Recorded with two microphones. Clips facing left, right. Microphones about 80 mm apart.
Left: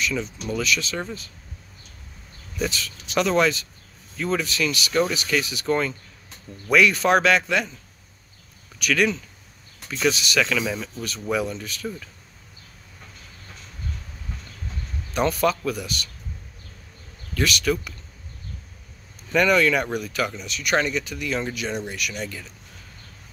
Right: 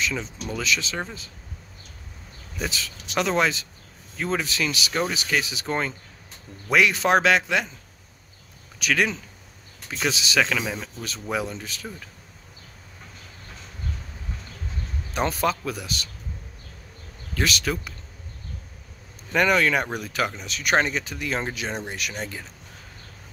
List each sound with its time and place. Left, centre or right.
0.0 s speech: right
2.6 s speech: centre
8.7 s speech: right
15.1 s speech: right
17.4 s speech: right
19.3 s speech: right